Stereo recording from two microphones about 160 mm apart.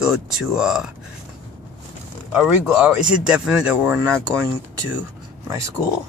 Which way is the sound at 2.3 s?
5° right (ahead or behind).